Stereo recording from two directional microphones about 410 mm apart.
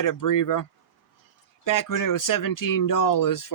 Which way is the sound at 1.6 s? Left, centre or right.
Left.